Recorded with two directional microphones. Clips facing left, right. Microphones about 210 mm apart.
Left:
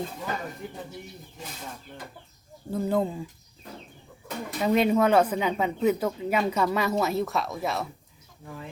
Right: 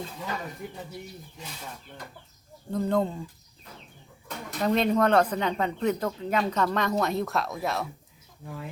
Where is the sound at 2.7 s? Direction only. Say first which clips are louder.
Even; 5° left (ahead or behind).